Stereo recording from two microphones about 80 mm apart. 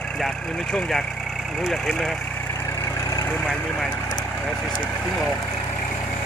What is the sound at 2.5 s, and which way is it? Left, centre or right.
Vehicle, left.